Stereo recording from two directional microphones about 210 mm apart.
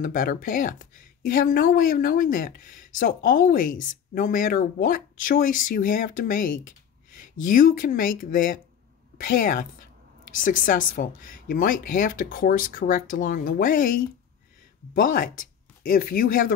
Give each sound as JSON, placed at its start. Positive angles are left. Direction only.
{"t": 0.0, "sound": "speech", "side_deg": 40}